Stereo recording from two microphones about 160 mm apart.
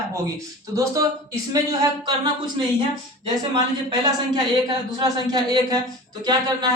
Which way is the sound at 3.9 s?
25° right (ahead or behind).